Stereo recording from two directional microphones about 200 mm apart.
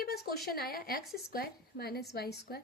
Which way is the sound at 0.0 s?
50° left (ahead or behind).